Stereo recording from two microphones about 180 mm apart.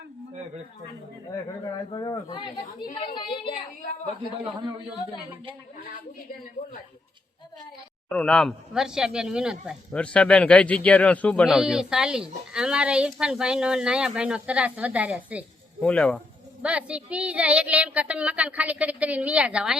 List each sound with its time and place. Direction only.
1.9 s speech: 20° left (ahead or behind)
8.1 s speech: 5° left (ahead or behind)
15.8 s speech: 5° left (ahead or behind)
16.6 s a woman's voice: 5° right (ahead or behind)